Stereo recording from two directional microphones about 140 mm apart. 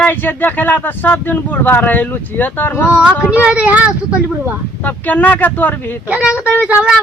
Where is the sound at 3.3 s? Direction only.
10° right (ahead or behind).